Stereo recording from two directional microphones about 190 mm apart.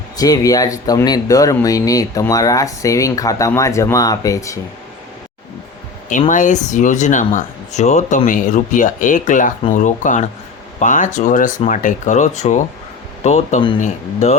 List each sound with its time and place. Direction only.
0.2 s speech: 20° left (ahead or behind)
6.1 s speech: 45° left (ahead or behind)